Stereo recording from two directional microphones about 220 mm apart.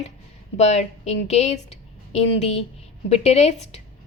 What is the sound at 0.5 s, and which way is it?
A woman's voice, 30° left (ahead or behind).